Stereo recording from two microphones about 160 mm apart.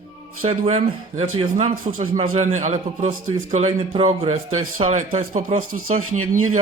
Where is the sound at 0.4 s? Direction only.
40° right (ahead or behind).